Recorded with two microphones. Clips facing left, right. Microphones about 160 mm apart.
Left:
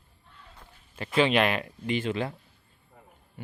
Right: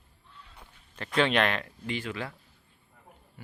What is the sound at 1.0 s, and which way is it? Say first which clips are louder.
Speech: left 2 dB; 5° left (ahead or behind).